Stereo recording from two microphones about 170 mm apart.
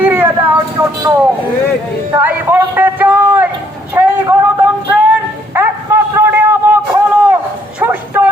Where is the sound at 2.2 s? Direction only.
10° right (ahead or behind).